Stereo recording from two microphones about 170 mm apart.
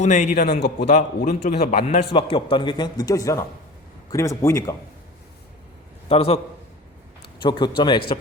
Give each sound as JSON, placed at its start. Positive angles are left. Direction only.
{"t": 0.0, "sound": "a man's voice", "side_deg": 45}
{"t": 2.1, "sound": "speech", "side_deg": 30}
{"t": 6.1, "sound": "a man's voice", "side_deg": 35}
{"t": 7.4, "sound": "speech", "side_deg": 25}